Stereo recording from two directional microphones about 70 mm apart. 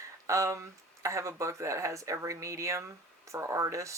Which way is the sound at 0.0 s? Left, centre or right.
Right.